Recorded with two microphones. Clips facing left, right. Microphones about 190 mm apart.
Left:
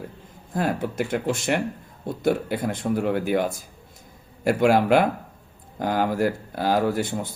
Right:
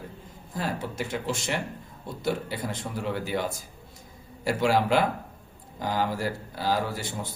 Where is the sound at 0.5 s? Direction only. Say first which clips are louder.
Left 7 dB; 55° left (ahead or behind).